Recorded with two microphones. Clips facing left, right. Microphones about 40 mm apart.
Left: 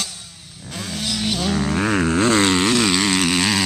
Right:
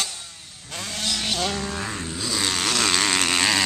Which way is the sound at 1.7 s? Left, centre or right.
Left.